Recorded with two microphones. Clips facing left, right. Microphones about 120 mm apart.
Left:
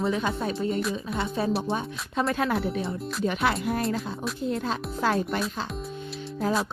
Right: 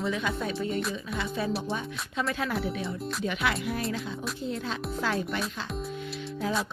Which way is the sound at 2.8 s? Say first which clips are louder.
Left 3 dB; 40° left (ahead or behind).